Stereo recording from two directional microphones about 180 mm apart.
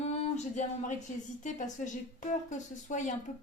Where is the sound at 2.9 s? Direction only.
45° left (ahead or behind).